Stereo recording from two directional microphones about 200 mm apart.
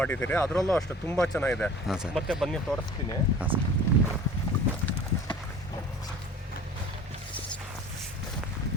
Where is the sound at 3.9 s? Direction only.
10° left (ahead or behind).